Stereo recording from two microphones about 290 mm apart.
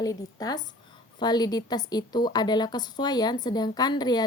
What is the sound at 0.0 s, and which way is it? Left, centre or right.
A woman's voice, centre.